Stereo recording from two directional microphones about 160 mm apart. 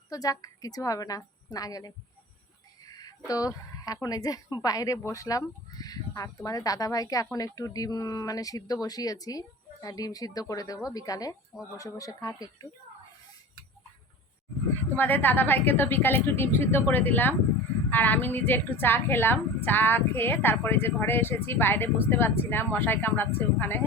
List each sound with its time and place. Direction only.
0.1 s speech: 20° left (ahead or behind)
2.9 s speech: 25° left (ahead or behind)
14.9 s a woman's voice: 10° left (ahead or behind)